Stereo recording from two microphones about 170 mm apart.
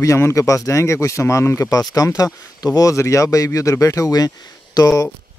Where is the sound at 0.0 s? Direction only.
20° left (ahead or behind).